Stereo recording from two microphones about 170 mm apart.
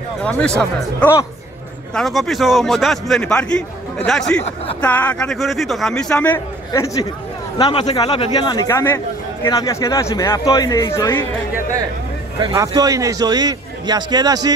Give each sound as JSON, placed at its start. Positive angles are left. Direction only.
{"t": 0.2, "sound": "a man's voice", "side_deg": 5}
{"t": 12.4, "sound": "a man's voice", "side_deg": -20}